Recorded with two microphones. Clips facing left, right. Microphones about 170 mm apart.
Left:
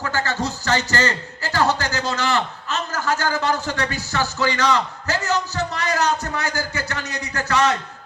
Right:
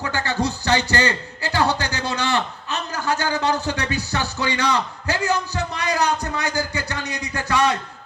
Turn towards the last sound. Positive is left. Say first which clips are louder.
# even
turn(degrees=-15)  # may be behind; listen again after turning